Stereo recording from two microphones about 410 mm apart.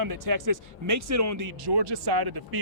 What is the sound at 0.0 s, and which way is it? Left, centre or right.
Speech, right.